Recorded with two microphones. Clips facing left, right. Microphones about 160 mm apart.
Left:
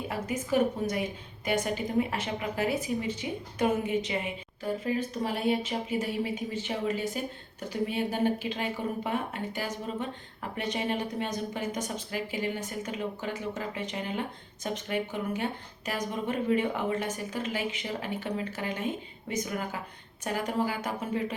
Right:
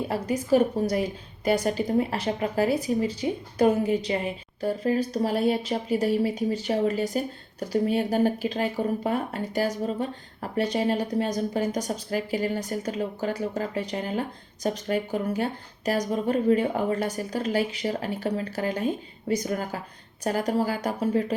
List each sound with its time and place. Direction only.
0.1 s speech: 35° right (ahead or behind)